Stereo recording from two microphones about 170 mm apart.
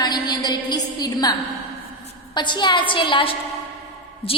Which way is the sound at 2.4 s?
25° left (ahead or behind).